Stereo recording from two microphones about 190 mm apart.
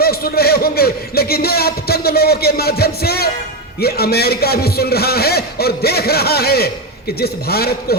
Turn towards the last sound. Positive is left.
turn(degrees=55)  # may be behind; listen again after turning